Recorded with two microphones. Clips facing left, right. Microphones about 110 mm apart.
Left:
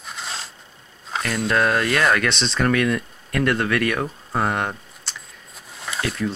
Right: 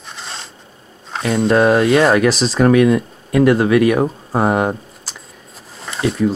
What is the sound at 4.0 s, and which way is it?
Speech, 30° right (ahead or behind).